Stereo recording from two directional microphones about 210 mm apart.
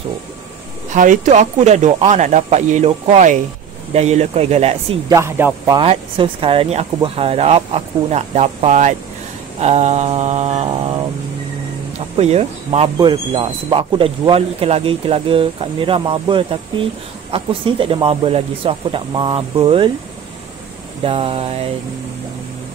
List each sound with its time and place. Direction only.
0.8 s speech: 40° right (ahead or behind)
5.1 s speech: 15° right (ahead or behind)
5.8 s speech: 25° right (ahead or behind)
12.2 s speech: 30° right (ahead or behind)
21.0 s speech: 25° right (ahead or behind)